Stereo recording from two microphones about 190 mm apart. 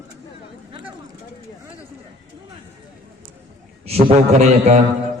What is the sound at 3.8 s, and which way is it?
Speech, 35° right (ahead or behind).